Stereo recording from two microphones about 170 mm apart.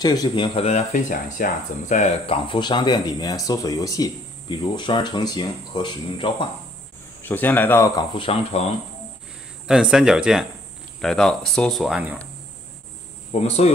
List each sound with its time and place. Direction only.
0.0 s speech: 25° left (ahead or behind)
0.6 s speech: 40° left (ahead or behind)
7.2 s speech: 10° left (ahead or behind)
8.1 s speech: 30° left (ahead or behind)
9.7 s speech: 5° right (ahead or behind)
13.3 s speech: 40° left (ahead or behind)